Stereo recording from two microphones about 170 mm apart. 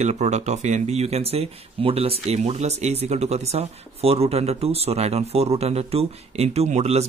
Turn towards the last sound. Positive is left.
turn(degrees=-40)  # may be behind; listen again after turning